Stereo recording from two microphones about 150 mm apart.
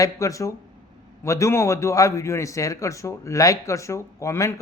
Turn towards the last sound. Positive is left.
turn(degrees=20)  # may be behind; listen again after turning